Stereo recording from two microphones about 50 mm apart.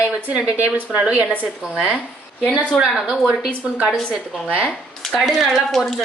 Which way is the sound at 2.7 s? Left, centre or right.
Centre.